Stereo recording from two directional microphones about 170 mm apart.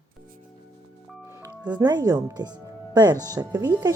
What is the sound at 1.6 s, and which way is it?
Speech, 25° right (ahead or behind).